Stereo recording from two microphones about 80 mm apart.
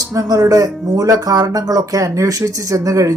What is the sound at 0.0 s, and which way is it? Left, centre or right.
Speech, right.